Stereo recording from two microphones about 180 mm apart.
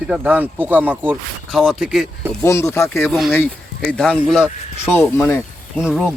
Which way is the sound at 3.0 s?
Centre (ahead or behind).